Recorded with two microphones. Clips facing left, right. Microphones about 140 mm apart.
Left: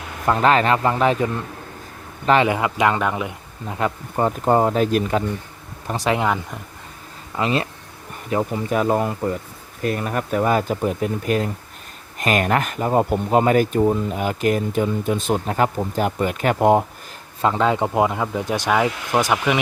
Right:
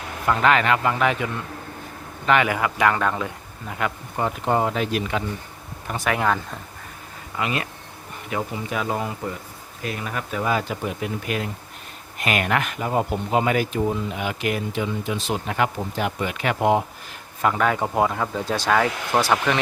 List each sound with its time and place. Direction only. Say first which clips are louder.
0.3 s speech: left 3 dB; 35° left (ahead or behind); by 3.8 s 15° left (ahead or behind)
3.8 s speech: left 4 dB; 35° left (ahead or behind)
6.1 s speech: left 1 dB; 15° left (ahead or behind)
7.3 s speech: left 5 dB; 30° left (ahead or behind); by 16.8 s 45° left (ahead or behind)
17.4 s speech: left 2 dB; 25° left (ahead or behind)